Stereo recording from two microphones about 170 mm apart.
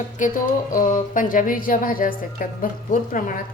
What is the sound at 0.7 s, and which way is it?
A woman's voice, 50° left (ahead or behind).